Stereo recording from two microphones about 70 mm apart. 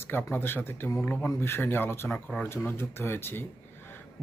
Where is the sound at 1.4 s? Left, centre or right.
Left.